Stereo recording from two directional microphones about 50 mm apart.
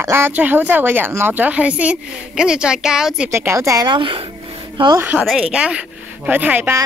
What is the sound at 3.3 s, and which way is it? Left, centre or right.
Speech, right.